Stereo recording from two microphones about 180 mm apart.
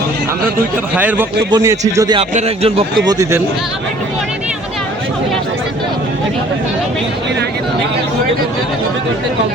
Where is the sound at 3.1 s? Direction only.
15° right (ahead or behind).